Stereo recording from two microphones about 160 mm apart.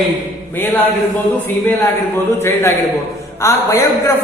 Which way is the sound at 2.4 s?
15° left (ahead or behind).